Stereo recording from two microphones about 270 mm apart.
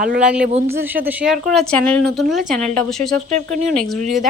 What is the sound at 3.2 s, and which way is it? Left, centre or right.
Speech, right.